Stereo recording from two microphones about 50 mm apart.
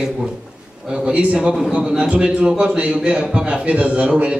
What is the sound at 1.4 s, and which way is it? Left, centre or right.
Speech, centre.